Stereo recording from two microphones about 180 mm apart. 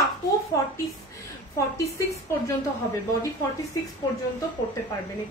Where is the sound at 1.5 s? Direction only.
15° left (ahead or behind).